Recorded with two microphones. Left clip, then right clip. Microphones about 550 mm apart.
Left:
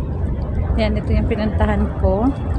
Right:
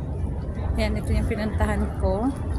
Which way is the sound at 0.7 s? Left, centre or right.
Right.